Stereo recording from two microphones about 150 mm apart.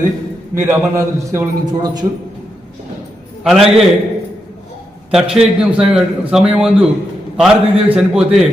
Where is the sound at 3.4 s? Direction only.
Centre (ahead or behind).